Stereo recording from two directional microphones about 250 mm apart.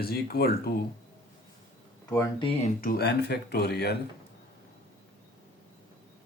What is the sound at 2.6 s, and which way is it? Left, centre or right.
Speech, left.